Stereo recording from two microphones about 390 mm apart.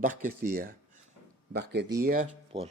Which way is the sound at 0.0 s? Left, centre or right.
Centre.